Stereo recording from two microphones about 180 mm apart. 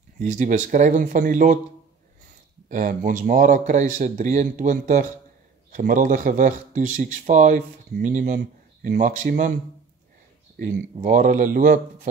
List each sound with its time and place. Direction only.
0.2 s speech: 45° right (ahead or behind)
2.7 s speech: 45° right (ahead or behind)
10.6 s speech: 45° right (ahead or behind)